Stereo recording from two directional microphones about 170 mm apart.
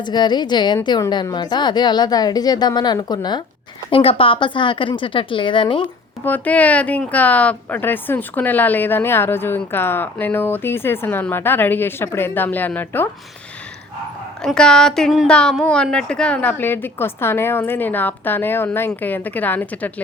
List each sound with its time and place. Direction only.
0.0 s a woman's voice: 25° left (ahead or behind)
6.2 s speech: 10° left (ahead or behind)
14.4 s speech: 5° left (ahead or behind)